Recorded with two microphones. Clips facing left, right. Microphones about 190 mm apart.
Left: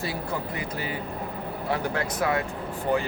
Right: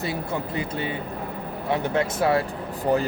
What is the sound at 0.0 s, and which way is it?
Speech, 25° right (ahead or behind).